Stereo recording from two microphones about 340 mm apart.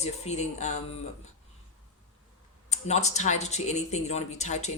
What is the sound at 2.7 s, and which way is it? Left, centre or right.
Speech, centre.